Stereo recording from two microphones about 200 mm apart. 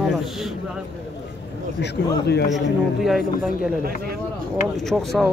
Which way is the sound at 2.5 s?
Centre (ahead or behind).